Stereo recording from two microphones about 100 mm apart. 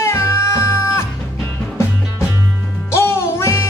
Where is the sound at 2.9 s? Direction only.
25° left (ahead or behind).